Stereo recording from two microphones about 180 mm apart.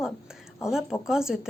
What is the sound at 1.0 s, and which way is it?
Speech, 5° right (ahead or behind).